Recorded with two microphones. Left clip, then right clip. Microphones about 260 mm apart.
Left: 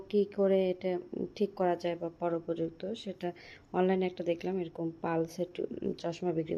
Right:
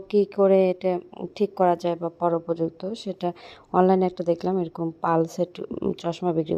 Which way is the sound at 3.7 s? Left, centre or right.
Right.